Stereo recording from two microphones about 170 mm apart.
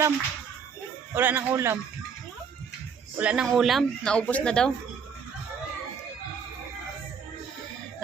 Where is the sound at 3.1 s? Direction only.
5° right (ahead or behind).